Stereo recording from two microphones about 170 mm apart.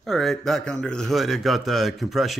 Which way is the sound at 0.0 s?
Centre (ahead or behind).